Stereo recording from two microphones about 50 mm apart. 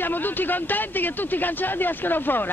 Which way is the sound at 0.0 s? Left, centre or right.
Left.